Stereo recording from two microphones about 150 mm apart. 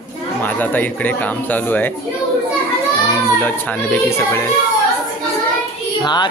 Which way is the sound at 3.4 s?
10° left (ahead or behind).